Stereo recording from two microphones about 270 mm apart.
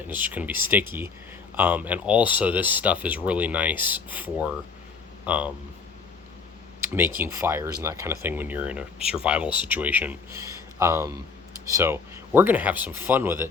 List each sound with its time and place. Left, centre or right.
0.1 s speech: centre
7.2 s speech: centre